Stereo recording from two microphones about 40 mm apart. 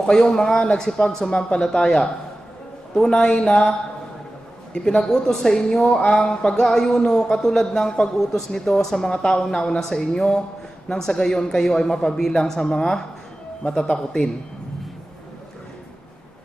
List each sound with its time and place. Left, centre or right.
0.0 s speech: centre
0.6 s speech: centre
3.3 s speech: centre
4.7 s speech: centre
5.9 s speech: left
9.1 s speech: left